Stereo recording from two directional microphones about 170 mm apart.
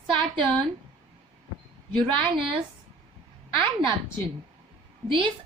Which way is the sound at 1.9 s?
30° right (ahead or behind).